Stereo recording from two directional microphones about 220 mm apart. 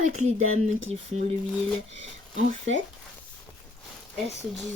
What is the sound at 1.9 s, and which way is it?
Speech, 55° right (ahead or behind).